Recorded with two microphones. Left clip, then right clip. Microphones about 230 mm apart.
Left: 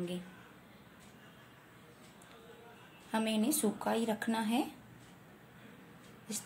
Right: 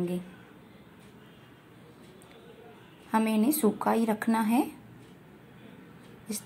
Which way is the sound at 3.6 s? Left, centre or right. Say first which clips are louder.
Right 7 dB; centre.